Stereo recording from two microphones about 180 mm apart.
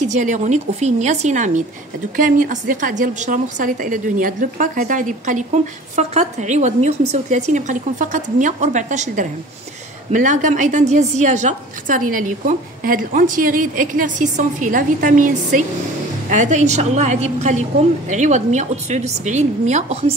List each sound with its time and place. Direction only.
0.1 s a woman's voice: 40° right (ahead or behind)